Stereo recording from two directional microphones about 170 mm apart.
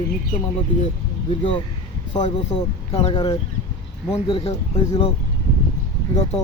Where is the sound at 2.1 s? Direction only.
45° left (ahead or behind).